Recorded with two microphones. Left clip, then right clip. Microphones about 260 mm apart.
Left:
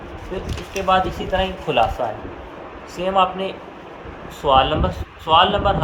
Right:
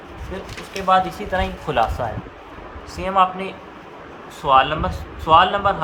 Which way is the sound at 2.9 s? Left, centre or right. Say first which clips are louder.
Even; right.